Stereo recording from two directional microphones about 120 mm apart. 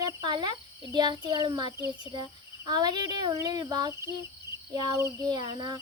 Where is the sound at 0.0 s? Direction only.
40° right (ahead or behind).